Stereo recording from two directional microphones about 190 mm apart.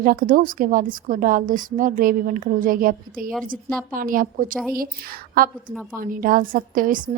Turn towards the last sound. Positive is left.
turn(degrees=-45)  # may be behind; listen again after turning